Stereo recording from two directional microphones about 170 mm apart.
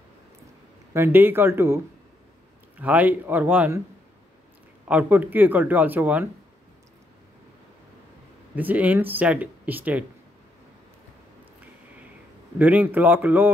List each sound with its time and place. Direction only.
0.9 s speech: 15° right (ahead or behind)
2.8 s speech: 10° right (ahead or behind)
4.8 s speech: 10° right (ahead or behind)
8.5 s speech: 10° right (ahead or behind)
12.5 s speech: 10° right (ahead or behind)